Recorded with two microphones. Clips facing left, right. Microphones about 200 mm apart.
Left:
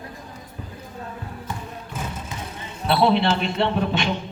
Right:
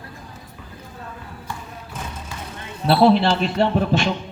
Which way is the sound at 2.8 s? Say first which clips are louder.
Right 4 dB; 35° right (ahead or behind).